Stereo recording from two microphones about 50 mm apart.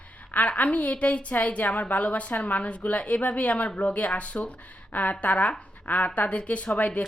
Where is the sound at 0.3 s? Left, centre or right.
Left.